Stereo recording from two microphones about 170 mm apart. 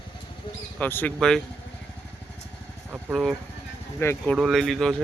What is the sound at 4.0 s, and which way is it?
Speech, 15° left (ahead or behind).